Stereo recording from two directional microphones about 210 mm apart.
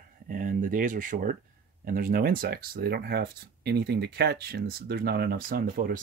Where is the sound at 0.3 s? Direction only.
40° right (ahead or behind).